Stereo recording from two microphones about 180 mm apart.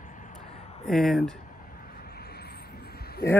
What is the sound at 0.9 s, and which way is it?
Speech, centre (ahead or behind).